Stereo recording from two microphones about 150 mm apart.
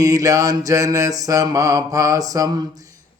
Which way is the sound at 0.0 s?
25° right (ahead or behind).